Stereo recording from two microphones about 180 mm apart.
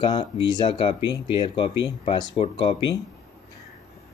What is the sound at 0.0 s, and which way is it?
Speech, 25° left (ahead or behind).